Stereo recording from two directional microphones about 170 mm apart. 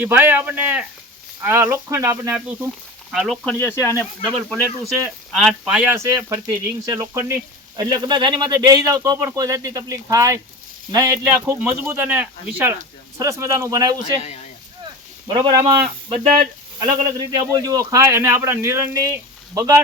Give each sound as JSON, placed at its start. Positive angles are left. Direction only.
{"t": 0.0, "sound": "a man's voice", "side_deg": -10}
{"t": 3.1, "sound": "speech", "side_deg": 0}
{"t": 3.5, "sound": "speech", "side_deg": 15}
{"t": 6.0, "sound": "a man's voice", "side_deg": -15}
{"t": 15.3, "sound": "a man's voice", "side_deg": -30}